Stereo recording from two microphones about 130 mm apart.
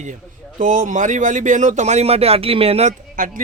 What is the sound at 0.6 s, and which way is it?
A man's voice, 75° right (ahead or behind).